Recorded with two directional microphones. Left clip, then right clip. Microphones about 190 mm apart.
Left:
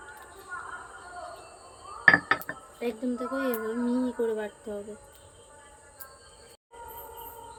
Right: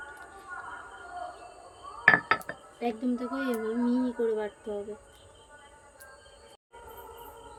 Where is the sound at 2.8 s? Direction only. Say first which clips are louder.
Even; 20° right (ahead or behind).